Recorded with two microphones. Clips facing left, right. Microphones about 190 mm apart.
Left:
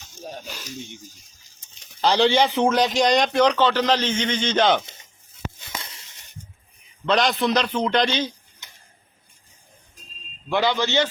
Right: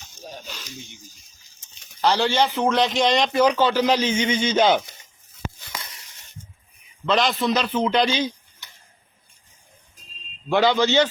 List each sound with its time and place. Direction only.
2.0 s speech: 15° left (ahead or behind)
2.6 s a man's voice: centre (ahead or behind)
5.5 s a sound: 25° left (ahead or behind)
7.0 s a man's voice: centre (ahead or behind)
8.6 s tick-tock: 20° left (ahead or behind)
10.5 s a man's voice: 20° right (ahead or behind)